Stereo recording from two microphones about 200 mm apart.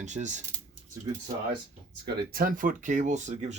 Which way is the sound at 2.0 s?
50° right (ahead or behind).